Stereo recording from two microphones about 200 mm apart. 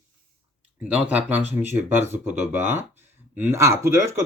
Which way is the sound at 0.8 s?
5° right (ahead or behind).